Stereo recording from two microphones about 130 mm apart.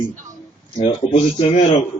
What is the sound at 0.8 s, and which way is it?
Speech, 65° left (ahead or behind).